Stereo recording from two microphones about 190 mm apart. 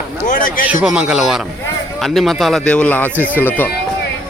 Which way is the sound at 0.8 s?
5° right (ahead or behind).